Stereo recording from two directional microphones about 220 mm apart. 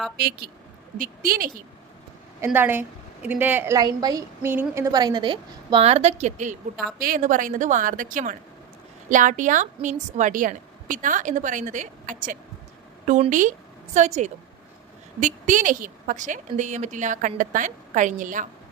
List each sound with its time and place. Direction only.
0.2 s a woman's voice: 45° right (ahead or behind)
2.4 s a woman's voice: 10° right (ahead or behind); by 18.4 s 35° right (ahead or behind)